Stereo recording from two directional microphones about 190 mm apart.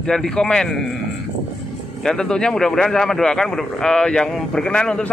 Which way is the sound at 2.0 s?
5° left (ahead or behind).